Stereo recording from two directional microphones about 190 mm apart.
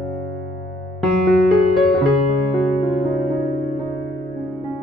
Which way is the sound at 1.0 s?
Centre (ahead or behind).